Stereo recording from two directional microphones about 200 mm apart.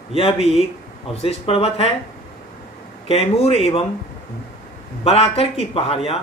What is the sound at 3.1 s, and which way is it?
Speech, 30° left (ahead or behind).